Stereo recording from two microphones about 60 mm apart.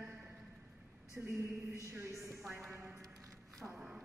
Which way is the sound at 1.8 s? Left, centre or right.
Right.